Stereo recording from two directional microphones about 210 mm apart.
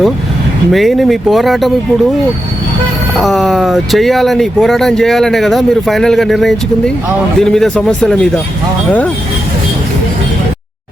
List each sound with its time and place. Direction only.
0.7 s speech: centre (ahead or behind)
3.2 s speech: centre (ahead or behind)